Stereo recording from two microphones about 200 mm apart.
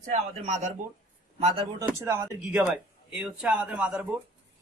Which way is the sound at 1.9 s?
10° right (ahead or behind).